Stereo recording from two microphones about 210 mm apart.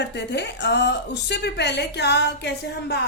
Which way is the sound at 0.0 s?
55° left (ahead or behind).